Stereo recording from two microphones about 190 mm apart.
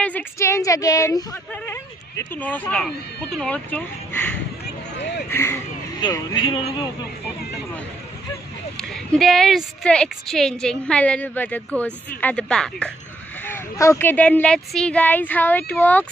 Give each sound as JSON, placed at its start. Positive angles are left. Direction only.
{"t": 0.0, "sound": "a woman's voice", "side_deg": 10}
{"t": 4.9, "sound": "speech", "side_deg": 65}
{"t": 5.3, "sound": "speech", "side_deg": 15}
{"t": 8.8, "sound": "a woman's voice", "side_deg": 0}